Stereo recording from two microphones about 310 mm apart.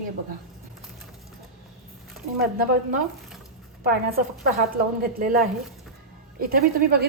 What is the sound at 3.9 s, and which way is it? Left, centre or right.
A woman's voice, right.